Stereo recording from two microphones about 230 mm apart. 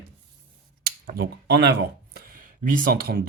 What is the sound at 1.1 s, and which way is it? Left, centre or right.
Speech, right.